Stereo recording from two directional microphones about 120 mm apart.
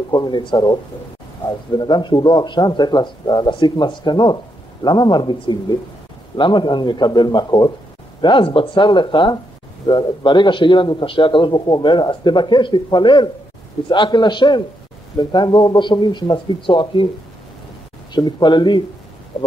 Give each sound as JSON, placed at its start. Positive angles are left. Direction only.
{"t": 0.1, "sound": "a man's voice", "side_deg": 35}
{"t": 1.8, "sound": "a man's voice", "side_deg": 40}
{"t": 18.1, "sound": "a man's voice", "side_deg": 40}
{"t": 19.3, "sound": "a sound", "side_deg": 40}